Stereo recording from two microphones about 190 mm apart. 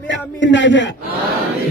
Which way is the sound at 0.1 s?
70° left (ahead or behind).